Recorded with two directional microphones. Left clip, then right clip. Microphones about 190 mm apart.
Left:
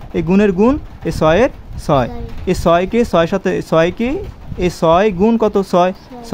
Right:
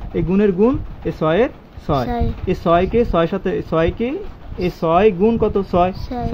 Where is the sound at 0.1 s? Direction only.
30° left (ahead or behind).